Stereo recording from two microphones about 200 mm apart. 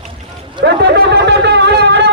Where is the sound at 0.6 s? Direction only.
55° right (ahead or behind).